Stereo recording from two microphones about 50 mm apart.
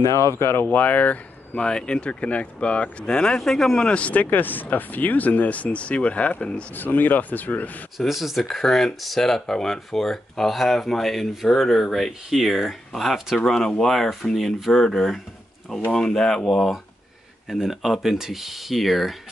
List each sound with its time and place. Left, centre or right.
0.0 s speech: left
0.6 s speech: left
1.6 s speech: centre
3.8 s speech: left
6.7 s speech: left
8.0 s speech: centre
17.5 s speech: centre